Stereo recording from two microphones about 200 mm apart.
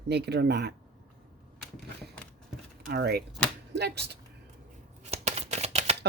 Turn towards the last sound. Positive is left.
turn(degrees=-35)  # may be behind; listen again after turning